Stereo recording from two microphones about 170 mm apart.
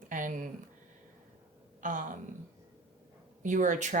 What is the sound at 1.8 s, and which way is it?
Speech, 50° right (ahead or behind).